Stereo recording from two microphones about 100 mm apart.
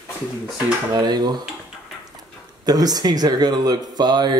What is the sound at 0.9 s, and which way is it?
Speech, 45° right (ahead or behind).